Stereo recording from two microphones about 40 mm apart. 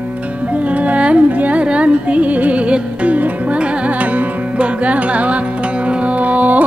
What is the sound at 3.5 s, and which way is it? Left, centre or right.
Music, right.